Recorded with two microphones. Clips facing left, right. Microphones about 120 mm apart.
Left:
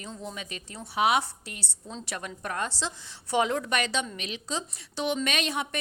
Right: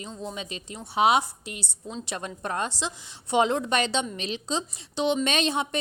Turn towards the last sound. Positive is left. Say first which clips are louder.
# right 4 dB
turn(degrees=-25)  # may be behind; listen again after turning